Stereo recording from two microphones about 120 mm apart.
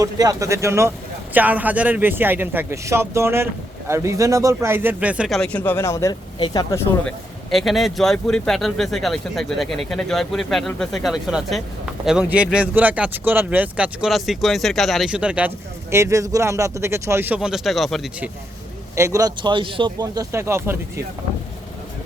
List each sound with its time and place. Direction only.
0.0 s a man's voice: 30° right (ahead or behind); by 5.3 s 10° right (ahead or behind)
5.3 s speech: 10° left (ahead or behind)
5.7 s a man's voice: 25° left (ahead or behind)
7.5 s speech: centre (ahead or behind)
15.9 s a man's voice: 25° right (ahead or behind); by 18.1 s centre (ahead or behind)
18.9 s a man's voice: 25° right (ahead or behind)
19.4 s speech: 40° right (ahead or behind)
20.0 s a man's voice: 25° right (ahead or behind)